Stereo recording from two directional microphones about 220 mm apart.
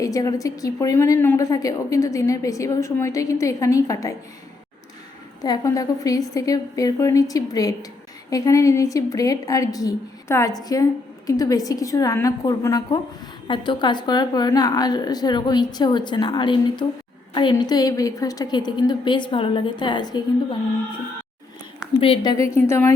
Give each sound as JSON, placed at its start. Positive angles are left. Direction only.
{"t": 0.0, "sound": "a woman's voice", "side_deg": 15}
{"t": 5.4, "sound": "a woman's voice", "side_deg": 15}
{"t": 22.0, "sound": "a woman's voice", "side_deg": 20}